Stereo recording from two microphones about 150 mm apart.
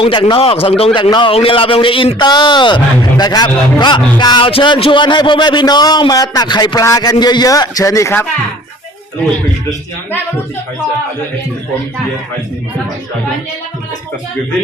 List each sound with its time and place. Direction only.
0.0 s a man's voice: 30° left (ahead or behind); by 8.3 s 15° left (ahead or behind)